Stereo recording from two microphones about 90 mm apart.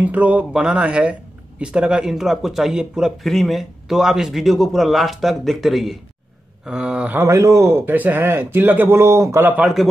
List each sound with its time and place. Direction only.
0.0 s speech: 15° right (ahead or behind)
7.2 s a man's voice: 35° right (ahead or behind)
7.9 s speech: 20° right (ahead or behind)
9.8 s speech: centre (ahead or behind)